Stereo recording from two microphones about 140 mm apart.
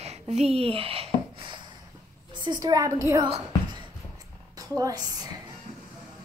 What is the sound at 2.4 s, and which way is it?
Speech, 25° right (ahead or behind).